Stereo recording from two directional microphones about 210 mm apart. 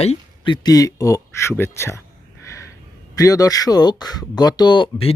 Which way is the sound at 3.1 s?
15° left (ahead or behind).